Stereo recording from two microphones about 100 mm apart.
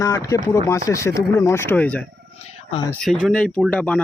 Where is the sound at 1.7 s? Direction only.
15° left (ahead or behind).